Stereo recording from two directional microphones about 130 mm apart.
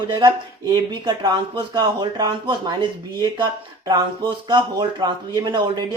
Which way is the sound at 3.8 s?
30° right (ahead or behind).